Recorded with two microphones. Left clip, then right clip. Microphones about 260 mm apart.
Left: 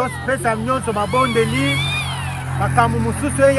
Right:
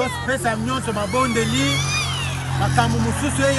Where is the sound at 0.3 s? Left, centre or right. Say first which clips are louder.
Left 6 dB; left.